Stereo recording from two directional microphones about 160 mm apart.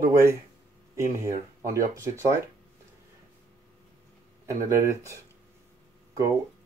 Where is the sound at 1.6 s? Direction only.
20° right (ahead or behind).